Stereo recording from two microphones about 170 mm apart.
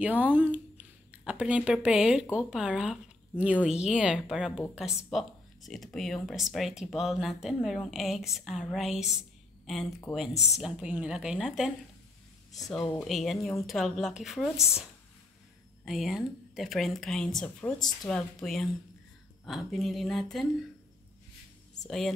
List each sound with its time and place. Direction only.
0.0 s speech: 10° right (ahead or behind)
9.8 s speech: 15° left (ahead or behind)
10.3 s speech: 40° left (ahead or behind)
10.6 s speech: 5° right (ahead or behind)
15.8 s speech: centre (ahead or behind)
21.8 s speech: 5° left (ahead or behind)